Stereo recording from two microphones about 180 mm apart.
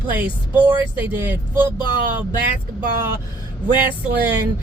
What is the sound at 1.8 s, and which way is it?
Speech, 25° left (ahead or behind).